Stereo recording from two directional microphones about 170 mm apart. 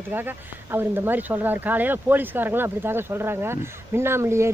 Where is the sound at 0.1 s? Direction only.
15° right (ahead or behind).